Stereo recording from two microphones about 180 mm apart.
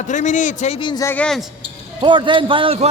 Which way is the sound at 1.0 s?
5° left (ahead or behind).